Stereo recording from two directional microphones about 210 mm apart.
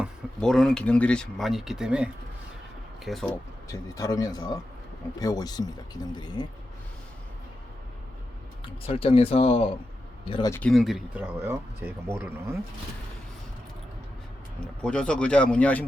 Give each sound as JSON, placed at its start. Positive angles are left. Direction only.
{"t": 0.0, "sound": "speech", "side_deg": 0}
{"t": 3.2, "sound": "speech", "side_deg": 15}
{"t": 8.8, "sound": "speech", "side_deg": 25}
{"t": 10.5, "sound": "speech", "side_deg": 5}
{"t": 14.8, "sound": "speech", "side_deg": 5}